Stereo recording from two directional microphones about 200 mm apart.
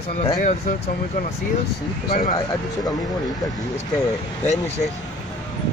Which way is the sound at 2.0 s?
45° left (ahead or behind).